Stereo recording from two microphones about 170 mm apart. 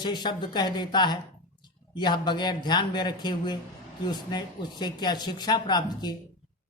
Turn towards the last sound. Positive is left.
turn(degrees=25)  # may be behind; listen again after turning